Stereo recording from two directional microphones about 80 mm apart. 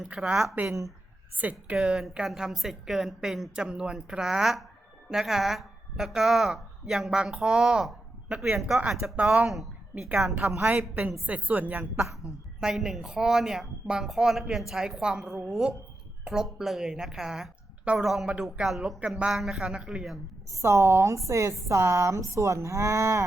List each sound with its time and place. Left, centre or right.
0.0 s a woman's voice: centre
0.5 s a woman's voice: right; by 8.8 s centre
9.0 s a woman's voice: centre
10.7 s a woman's voice: centre
12.5 s a woman's voice: centre
20.6 s a woman's voice: right